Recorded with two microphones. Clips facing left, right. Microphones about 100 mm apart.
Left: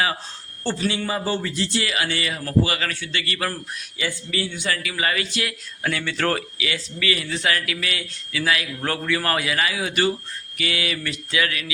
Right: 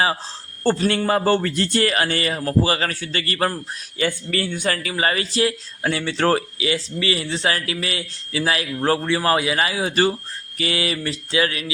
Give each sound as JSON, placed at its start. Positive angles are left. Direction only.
{"t": 0.6, "sound": "a man's voice", "side_deg": -50}
{"t": 3.9, "sound": "speech", "side_deg": -50}